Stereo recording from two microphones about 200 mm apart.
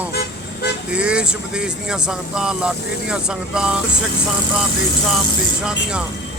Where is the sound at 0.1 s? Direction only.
50° left (ahead or behind).